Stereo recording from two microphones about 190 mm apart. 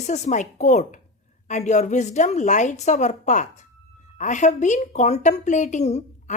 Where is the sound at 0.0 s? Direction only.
40° left (ahead or behind).